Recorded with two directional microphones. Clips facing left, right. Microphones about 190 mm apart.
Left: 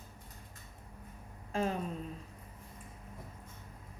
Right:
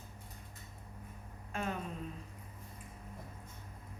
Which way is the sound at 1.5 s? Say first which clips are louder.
Left 5 dB; 30° left (ahead or behind).